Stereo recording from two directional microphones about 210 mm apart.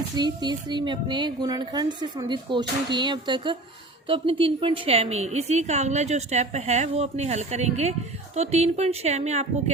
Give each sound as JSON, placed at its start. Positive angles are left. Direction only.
{"t": 0.2, "sound": "a woman's voice", "side_deg": -20}